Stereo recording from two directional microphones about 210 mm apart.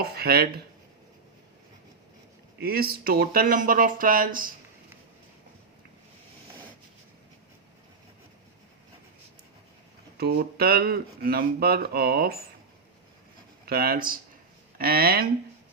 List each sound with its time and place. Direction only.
0.0 s speech: 45° right (ahead or behind)
2.6 s speech: 45° right (ahead or behind)
10.2 s speech: 50° right (ahead or behind)
13.7 s speech: 45° right (ahead or behind)